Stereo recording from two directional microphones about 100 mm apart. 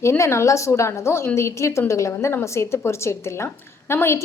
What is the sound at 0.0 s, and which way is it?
A woman's voice, 30° left (ahead or behind).